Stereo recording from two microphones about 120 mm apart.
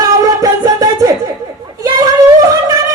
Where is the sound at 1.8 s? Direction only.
30° right (ahead or behind).